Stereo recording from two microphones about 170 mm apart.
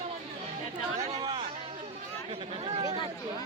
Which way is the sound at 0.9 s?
45° right (ahead or behind).